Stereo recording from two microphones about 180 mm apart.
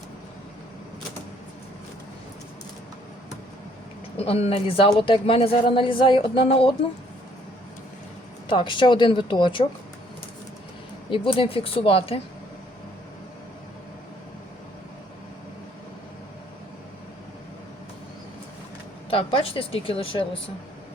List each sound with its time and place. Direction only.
4.2 s a woman's voice: 35° left (ahead or behind)
8.4 s a woman's voice: 25° left (ahead or behind)
11.1 s a woman's voice: 30° left (ahead or behind)
19.1 s a woman's voice: 30° left (ahead or behind)